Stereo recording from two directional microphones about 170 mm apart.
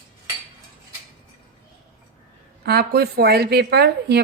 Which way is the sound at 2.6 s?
70° right (ahead or behind).